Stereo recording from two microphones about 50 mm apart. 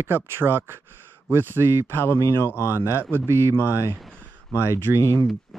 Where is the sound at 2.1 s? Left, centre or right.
Left.